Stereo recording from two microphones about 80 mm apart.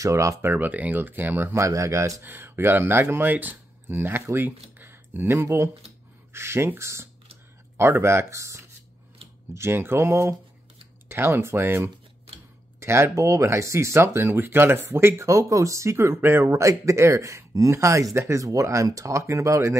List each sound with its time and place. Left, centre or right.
0.0 s speech: right
0.5 s speech: right
1.6 s speech: right
2.2 s speech: right